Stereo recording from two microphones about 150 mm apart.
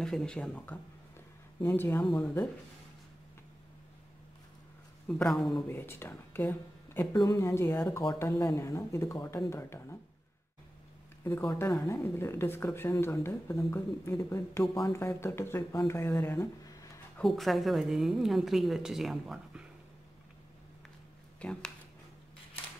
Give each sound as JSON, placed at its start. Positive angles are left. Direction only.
{"t": 0.0, "sound": "a woman's voice", "side_deg": 5}
{"t": 5.0, "sound": "a woman's voice", "side_deg": 5}
{"t": 5.7, "sound": "speech", "side_deg": 15}
{"t": 11.2, "sound": "speech", "side_deg": 15}
{"t": 17.2, "sound": "a woman's voice", "side_deg": 0}
{"t": 21.4, "sound": "speech", "side_deg": 5}